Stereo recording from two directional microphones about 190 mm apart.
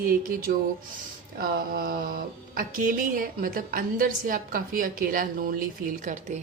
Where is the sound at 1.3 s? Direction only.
50° right (ahead or behind).